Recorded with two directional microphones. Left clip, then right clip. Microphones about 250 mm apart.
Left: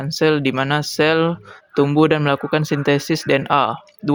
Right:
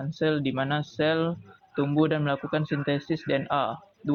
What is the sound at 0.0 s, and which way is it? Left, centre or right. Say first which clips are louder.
Speech: left 10 dB; left.